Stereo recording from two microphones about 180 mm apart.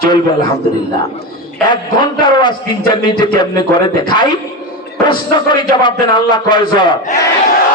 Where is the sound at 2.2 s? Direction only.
25° left (ahead or behind).